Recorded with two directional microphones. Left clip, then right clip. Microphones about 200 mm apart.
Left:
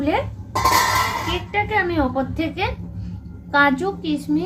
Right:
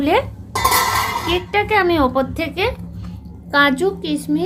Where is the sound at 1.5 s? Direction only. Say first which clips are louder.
Right 4 dB; 60° right (ahead or behind).